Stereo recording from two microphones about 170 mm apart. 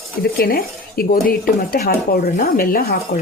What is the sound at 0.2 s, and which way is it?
Speech, 60° left (ahead or behind).